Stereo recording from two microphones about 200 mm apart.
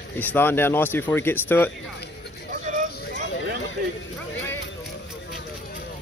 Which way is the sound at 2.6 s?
40° right (ahead or behind).